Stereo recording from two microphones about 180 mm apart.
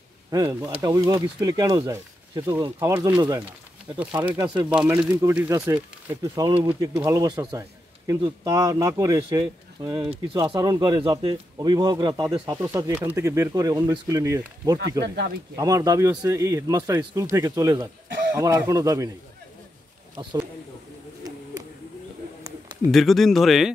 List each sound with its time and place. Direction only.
0.3 s speech: 20° right (ahead or behind)
4.6 s speech: 10° right (ahead or behind)
14.8 s speech: 70° right (ahead or behind)
15.5 s speech: 20° right (ahead or behind)
22.4 s a sound: 20° right (ahead or behind)
22.8 s speech: centre (ahead or behind)